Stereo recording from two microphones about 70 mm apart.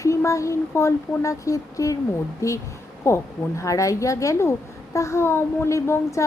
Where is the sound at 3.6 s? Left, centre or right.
Left.